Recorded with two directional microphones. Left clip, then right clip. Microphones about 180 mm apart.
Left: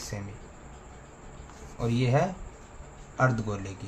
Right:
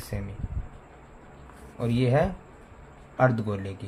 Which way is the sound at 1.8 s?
25° right (ahead or behind).